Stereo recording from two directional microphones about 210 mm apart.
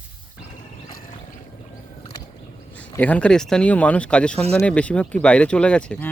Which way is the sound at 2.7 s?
5° left (ahead or behind).